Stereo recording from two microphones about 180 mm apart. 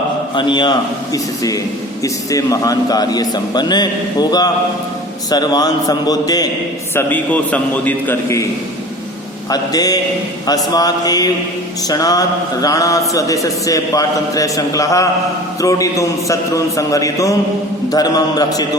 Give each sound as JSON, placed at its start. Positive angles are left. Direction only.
{"t": 0.3, "sound": "a man's voice", "side_deg": 25}
{"t": 6.9, "sound": "a man's voice", "side_deg": 10}
{"t": 9.5, "sound": "a man's voice", "side_deg": 20}